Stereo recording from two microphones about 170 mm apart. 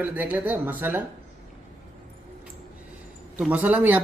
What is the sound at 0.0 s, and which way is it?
A man's voice, 10° right (ahead or behind).